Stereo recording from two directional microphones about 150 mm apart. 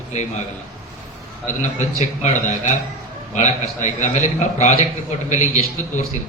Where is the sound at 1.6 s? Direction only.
50° left (ahead or behind).